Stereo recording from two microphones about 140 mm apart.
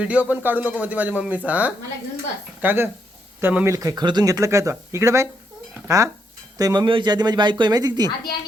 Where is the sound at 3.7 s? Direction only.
25° right (ahead or behind).